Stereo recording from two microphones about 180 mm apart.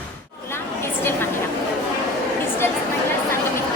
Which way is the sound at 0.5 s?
15° left (ahead or behind).